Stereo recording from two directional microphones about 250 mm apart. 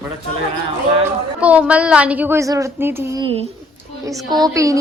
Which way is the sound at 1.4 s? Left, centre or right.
Centre.